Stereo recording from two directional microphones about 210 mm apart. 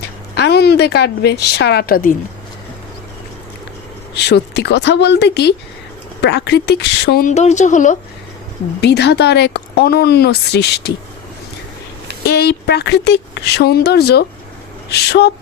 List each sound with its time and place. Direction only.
0.3 s a woman's voice: 50° left (ahead or behind)
4.1 s speech: 55° left (ahead or behind); by 7.9 s 35° left (ahead or behind)
8.8 s speech: 50° left (ahead or behind)
12.2 s speech: 50° left (ahead or behind)